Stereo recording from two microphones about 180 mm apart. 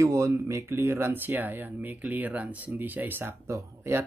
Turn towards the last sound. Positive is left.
turn(degrees=-15)  # may be behind; listen again after turning